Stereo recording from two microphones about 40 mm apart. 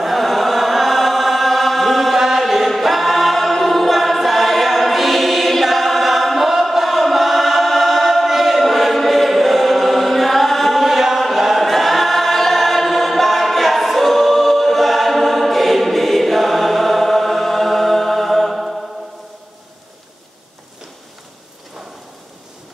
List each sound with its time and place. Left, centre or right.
0.0 s chant: centre